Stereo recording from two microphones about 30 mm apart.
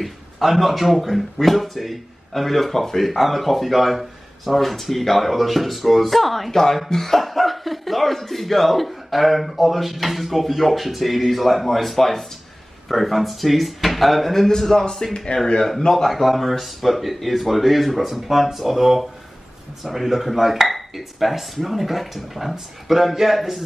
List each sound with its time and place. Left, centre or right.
0.0 s speech: centre
14.6 s speech: centre
15.3 s speech: left
15.9 s speech: centre